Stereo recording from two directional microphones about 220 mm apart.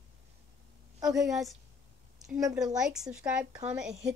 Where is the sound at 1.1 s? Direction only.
Centre (ahead or behind).